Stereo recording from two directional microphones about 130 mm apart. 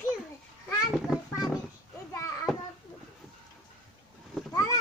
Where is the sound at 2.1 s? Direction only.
25° left (ahead or behind).